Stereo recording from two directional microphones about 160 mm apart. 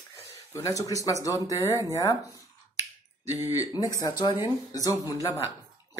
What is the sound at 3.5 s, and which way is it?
Speech, 20° left (ahead or behind).